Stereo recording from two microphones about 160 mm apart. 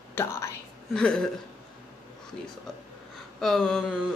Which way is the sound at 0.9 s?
5° left (ahead or behind).